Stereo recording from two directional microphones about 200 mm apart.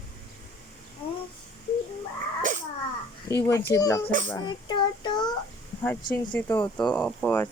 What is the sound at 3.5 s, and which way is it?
A child's voice, 15° left (ahead or behind).